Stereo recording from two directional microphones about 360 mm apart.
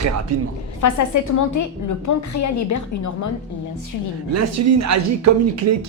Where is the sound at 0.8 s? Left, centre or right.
Left.